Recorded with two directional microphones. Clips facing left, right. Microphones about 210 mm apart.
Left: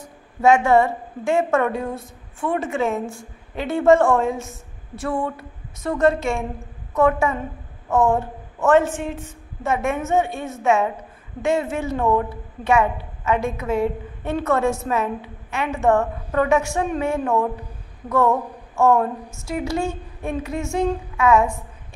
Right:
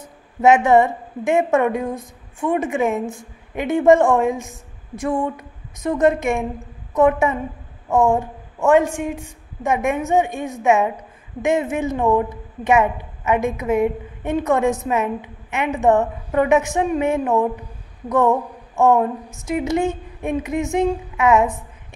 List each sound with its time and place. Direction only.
0.0 s a woman's voice: 20° right (ahead or behind)